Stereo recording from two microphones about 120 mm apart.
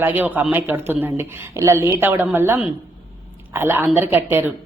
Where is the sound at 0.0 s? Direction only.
15° right (ahead or behind).